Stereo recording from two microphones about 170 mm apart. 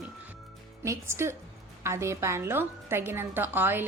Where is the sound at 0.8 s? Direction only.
15° right (ahead or behind).